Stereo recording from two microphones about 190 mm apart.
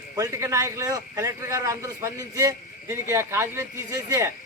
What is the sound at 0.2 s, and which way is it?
A man's voice, 15° right (ahead or behind).